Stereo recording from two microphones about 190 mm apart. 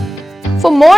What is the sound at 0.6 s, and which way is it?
Music, centre (ahead or behind).